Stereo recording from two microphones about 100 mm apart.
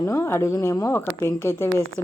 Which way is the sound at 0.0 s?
25° left (ahead or behind).